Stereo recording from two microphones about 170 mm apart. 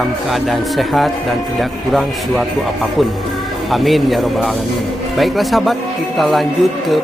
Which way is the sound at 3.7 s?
Centre (ahead or behind).